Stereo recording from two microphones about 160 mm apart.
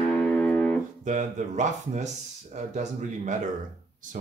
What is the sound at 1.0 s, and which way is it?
A man's voice, 50° right (ahead or behind).